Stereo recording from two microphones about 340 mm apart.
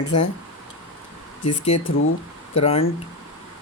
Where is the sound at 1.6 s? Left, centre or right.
Centre.